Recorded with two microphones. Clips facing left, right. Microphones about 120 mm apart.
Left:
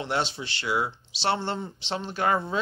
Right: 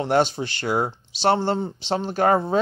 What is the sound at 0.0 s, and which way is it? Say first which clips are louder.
Speech: right 8 dB; 45° right (ahead or behind).